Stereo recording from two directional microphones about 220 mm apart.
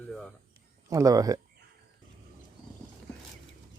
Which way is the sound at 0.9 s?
15° right (ahead or behind).